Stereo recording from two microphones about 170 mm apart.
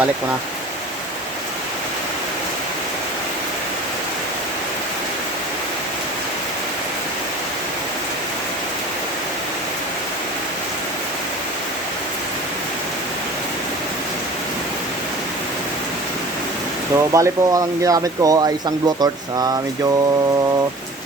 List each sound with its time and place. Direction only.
16.9 s speech: 20° right (ahead or behind)